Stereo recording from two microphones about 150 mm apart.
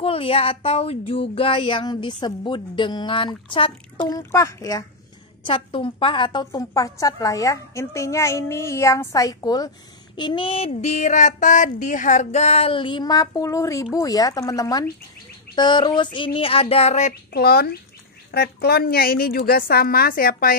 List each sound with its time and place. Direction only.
0.0 s speech: 40° left (ahead or behind)
4.1 s a woman's voice: 20° left (ahead or behind)
5.4 s a woman's voice: 35° left (ahead or behind)
17.3 s a woman's voice: 90° left